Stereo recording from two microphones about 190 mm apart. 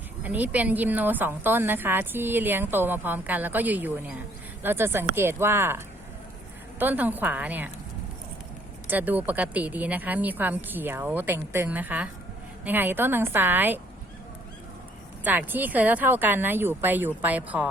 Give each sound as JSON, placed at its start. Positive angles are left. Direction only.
{"t": 0.2, "sound": "a woman's voice", "side_deg": -10}
{"t": 8.9, "sound": "a woman's voice", "side_deg": -10}
{"t": 15.2, "sound": "a woman's voice", "side_deg": -10}